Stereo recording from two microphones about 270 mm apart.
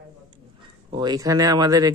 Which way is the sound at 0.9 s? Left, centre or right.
Centre.